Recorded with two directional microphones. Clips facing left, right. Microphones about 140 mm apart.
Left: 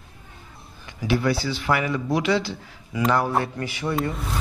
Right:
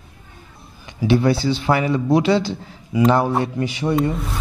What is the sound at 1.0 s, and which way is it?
Speech, 25° right (ahead or behind).